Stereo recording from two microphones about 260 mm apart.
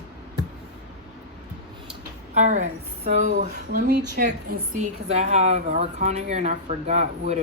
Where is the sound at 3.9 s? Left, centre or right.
Right.